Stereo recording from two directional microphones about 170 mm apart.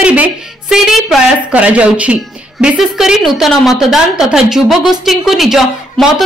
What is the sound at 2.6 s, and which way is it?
A woman's voice, 5° right (ahead or behind).